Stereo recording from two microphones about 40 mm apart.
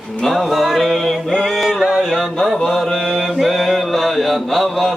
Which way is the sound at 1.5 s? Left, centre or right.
Centre.